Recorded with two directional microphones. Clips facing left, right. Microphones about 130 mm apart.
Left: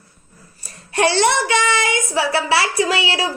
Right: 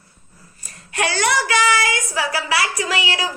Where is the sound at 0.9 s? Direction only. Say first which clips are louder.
Left 4 dB; 30° left (ahead or behind).